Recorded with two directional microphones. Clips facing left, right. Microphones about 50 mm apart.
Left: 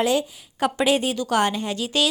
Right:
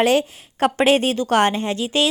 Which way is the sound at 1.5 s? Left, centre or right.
Right.